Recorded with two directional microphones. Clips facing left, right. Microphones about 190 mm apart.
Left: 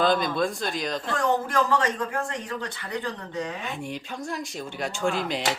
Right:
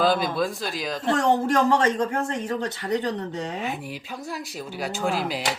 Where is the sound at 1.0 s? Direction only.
25° right (ahead or behind).